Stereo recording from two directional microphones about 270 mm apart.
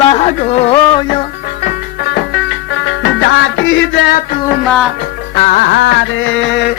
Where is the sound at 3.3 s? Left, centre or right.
Left.